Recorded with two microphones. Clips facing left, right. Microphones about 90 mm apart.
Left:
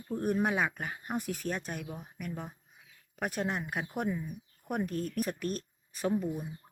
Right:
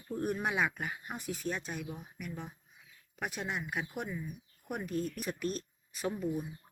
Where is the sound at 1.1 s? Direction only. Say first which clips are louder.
Left 5 dB; 55° left (ahead or behind).